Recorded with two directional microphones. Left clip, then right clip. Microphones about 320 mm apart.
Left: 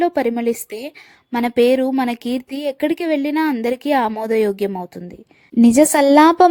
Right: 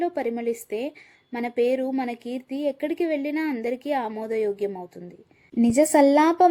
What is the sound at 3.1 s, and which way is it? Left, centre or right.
Speech, left.